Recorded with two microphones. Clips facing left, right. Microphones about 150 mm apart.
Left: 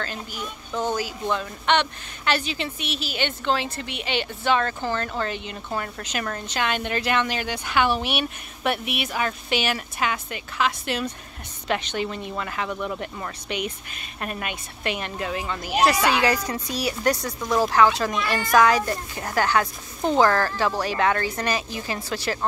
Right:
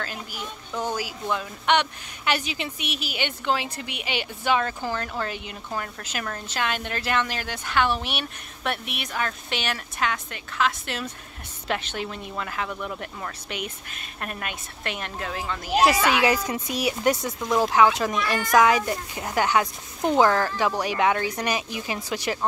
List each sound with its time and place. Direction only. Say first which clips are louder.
0.0 s speech: left 2 dB; 5° right (ahead or behind)
15.8 s speech: even; 10° right (ahead or behind)
16.5 s speech: right 1 dB; 20° right (ahead or behind)